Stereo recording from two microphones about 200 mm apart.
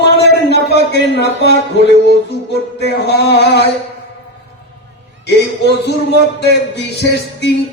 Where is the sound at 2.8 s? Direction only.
55° left (ahead or behind).